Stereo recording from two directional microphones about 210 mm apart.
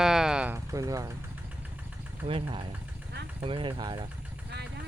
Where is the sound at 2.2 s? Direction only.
25° right (ahead or behind).